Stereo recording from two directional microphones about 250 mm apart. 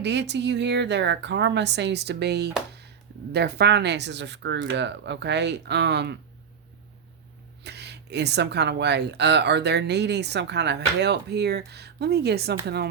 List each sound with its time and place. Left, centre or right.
0.0 s speech: right
7.6 s speech: right